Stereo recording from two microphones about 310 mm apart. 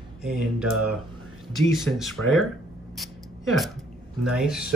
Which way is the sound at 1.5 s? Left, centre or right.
Centre.